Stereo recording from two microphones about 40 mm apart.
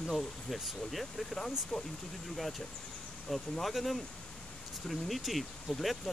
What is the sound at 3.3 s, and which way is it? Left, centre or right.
Speech, centre.